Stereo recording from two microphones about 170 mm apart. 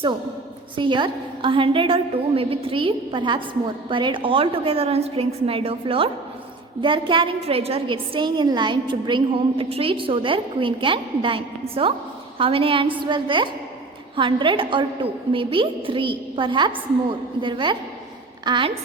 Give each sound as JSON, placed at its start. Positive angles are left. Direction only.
{"t": 0.8, "sound": "a woman's voice", "side_deg": -30}
{"t": 7.1, "sound": "a woman's voice", "side_deg": -30}